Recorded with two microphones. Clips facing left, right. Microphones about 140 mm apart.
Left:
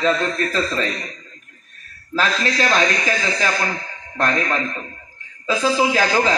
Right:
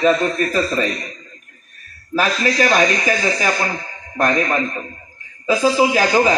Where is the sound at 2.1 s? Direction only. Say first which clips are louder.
Right 3 dB; 15° right (ahead or behind).